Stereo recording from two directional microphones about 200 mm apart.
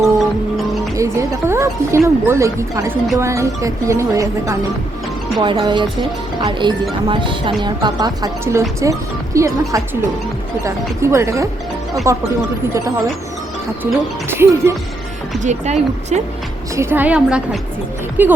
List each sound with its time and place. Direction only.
0.9 s speech: 15° right (ahead or behind)
14.3 s speech: 15° right (ahead or behind)
15.4 s speech: 35° right (ahead or behind)
16.7 s speech: 10° right (ahead or behind)